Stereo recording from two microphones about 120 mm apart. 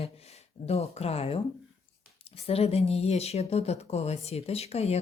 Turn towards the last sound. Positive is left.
turn(degrees=60)  # may be behind; listen again after turning